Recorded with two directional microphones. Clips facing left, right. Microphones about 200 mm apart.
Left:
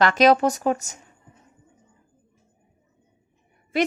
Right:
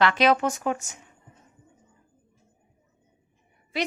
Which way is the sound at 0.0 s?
40° left (ahead or behind).